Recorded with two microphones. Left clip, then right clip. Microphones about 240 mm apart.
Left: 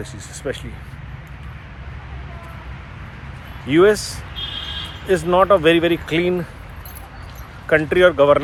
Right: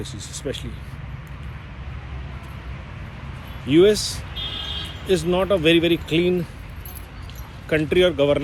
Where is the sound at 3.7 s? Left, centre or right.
Centre.